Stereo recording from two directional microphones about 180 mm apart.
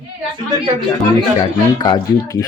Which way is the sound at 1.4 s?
25° left (ahead or behind).